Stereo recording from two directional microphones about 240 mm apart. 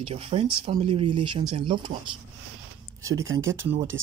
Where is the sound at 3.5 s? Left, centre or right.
Right.